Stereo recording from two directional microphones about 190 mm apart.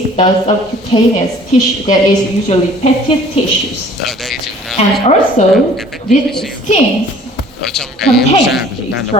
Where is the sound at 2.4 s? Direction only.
30° left (ahead or behind).